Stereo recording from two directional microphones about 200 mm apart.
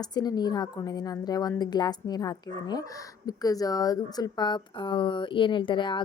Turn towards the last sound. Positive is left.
turn(degrees=25)  # may be behind; listen again after turning